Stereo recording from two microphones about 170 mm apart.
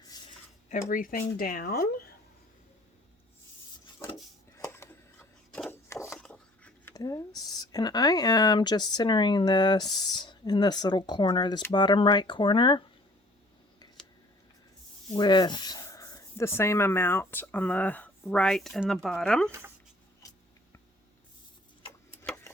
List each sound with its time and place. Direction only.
0.7 s speech: 55° left (ahead or behind)
4.5 s a sound: 15° left (ahead or behind)
6.1 s a sound: 5° left (ahead or behind)
6.9 s speech: 20° left (ahead or behind)
15.1 s speech: 25° left (ahead or behind); by 19.5 s 5° left (ahead or behind)
19.5 s speech: 15° right (ahead or behind)